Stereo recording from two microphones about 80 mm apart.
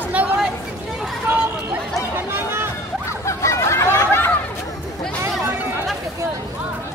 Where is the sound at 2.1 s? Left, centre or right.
Right.